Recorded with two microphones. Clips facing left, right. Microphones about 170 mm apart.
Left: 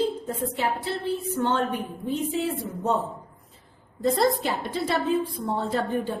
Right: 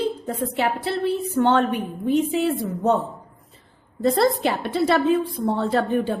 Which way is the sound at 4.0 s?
70° right (ahead or behind).